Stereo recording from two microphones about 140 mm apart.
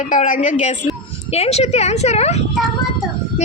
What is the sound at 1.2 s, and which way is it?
A woman's voice, 45° left (ahead or behind).